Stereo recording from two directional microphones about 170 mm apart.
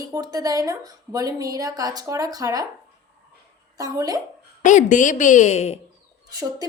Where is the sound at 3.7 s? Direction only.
20° right (ahead or behind).